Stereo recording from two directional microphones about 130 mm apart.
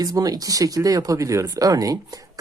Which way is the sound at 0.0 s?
30° right (ahead or behind).